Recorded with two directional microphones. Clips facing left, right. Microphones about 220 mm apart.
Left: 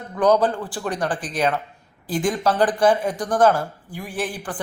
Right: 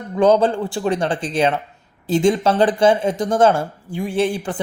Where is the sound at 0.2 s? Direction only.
25° right (ahead or behind).